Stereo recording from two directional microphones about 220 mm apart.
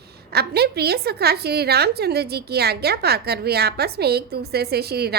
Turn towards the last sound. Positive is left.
turn(degrees=-45)  # may be behind; listen again after turning